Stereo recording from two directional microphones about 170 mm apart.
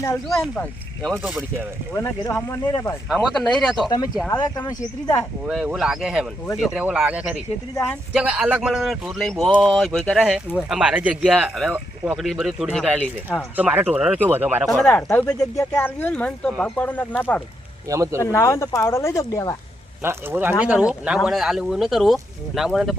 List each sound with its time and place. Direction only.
1.0 s speech: centre (ahead or behind)
1.9 s speech: 20° left (ahead or behind)
3.1 s speech: centre (ahead or behind)
3.8 s speech: 25° left (ahead or behind)
5.5 s speech: 5° right (ahead or behind)
14.8 s speech: 10° left (ahead or behind)
17.8 s speech: 20° right (ahead or behind)
18.2 s speech: 15° left (ahead or behind)
20.0 s speech: 15° right (ahead or behind)